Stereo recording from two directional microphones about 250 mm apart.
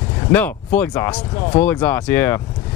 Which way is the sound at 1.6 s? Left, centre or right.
Centre.